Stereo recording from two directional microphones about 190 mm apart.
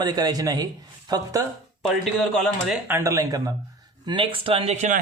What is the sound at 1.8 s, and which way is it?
Speech, centre (ahead or behind).